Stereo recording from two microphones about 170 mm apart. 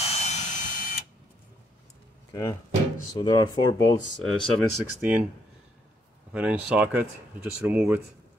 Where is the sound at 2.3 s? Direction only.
20° left (ahead or behind).